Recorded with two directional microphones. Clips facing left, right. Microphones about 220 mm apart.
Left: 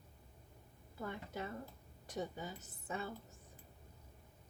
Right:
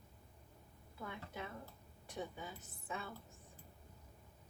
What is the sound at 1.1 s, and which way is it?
A woman's voice, 40° left (ahead or behind).